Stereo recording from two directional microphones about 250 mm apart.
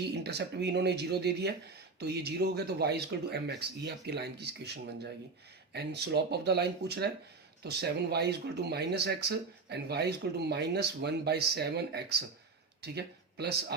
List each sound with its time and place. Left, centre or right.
0.1 s speech: right